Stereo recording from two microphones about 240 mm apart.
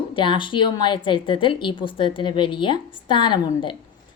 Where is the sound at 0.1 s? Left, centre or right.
Centre.